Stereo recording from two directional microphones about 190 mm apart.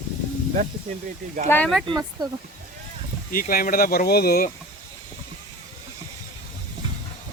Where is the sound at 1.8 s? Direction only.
20° right (ahead or behind).